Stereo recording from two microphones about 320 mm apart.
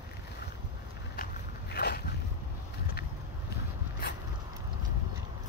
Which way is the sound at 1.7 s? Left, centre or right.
Left.